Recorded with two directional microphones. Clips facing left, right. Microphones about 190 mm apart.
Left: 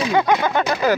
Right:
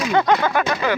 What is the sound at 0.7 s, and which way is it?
Speech, 40° left (ahead or behind).